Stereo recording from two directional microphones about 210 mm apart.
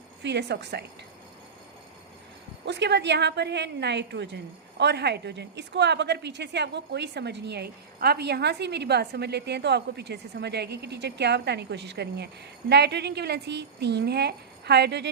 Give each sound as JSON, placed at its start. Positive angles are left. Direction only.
{"t": 0.2, "sound": "a woman's voice", "side_deg": -55}
{"t": 2.6, "sound": "a woman's voice", "side_deg": -55}